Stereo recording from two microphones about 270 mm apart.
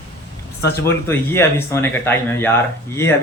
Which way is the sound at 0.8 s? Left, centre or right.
Centre.